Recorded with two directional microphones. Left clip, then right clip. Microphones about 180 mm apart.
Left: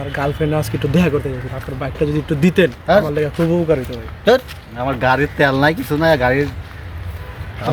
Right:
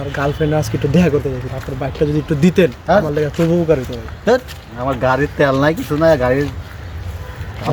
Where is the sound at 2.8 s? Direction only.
20° left (ahead or behind).